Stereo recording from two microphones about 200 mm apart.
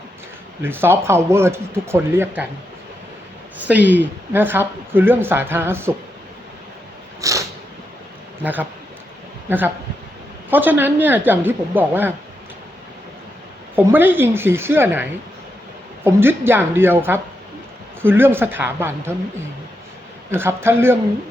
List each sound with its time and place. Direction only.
0.6 s speech: 10° right (ahead or behind)
3.7 s speech: 10° right (ahead or behind)
7.2 s a sound: 15° right (ahead or behind)
9.5 s speech: 10° right (ahead or behind)
13.7 s speech: 10° right (ahead or behind)
16.0 s speech: 10° right (ahead or behind)
20.3 s speech: 10° right (ahead or behind)